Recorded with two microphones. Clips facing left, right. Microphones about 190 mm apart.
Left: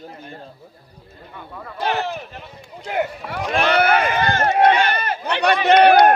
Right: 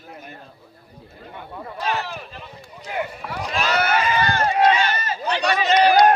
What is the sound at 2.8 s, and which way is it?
Speech, 50° left (ahead or behind).